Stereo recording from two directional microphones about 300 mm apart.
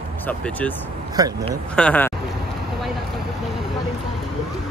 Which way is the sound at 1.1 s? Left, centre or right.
Centre.